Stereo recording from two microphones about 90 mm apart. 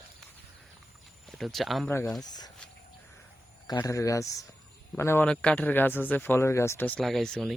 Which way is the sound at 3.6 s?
45° left (ahead or behind).